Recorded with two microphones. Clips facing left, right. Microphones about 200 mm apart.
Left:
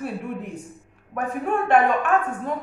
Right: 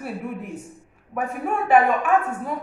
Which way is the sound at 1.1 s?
5° right (ahead or behind).